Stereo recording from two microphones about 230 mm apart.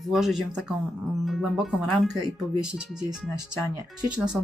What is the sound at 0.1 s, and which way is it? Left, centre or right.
Speech, centre.